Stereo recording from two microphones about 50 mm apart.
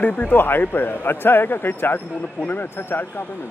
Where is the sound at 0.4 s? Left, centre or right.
Left.